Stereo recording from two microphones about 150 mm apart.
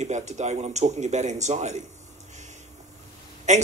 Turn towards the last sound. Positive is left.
turn(degrees=-50)  # may be behind; listen again after turning